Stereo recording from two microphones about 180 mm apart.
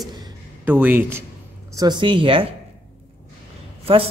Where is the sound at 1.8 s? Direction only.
25° right (ahead or behind).